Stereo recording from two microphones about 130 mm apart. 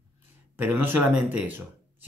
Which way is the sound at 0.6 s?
15° right (ahead or behind).